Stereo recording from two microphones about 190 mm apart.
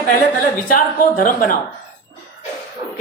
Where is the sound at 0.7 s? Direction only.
45° left (ahead or behind).